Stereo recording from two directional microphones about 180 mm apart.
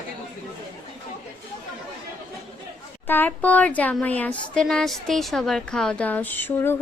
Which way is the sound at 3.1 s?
10° left (ahead or behind).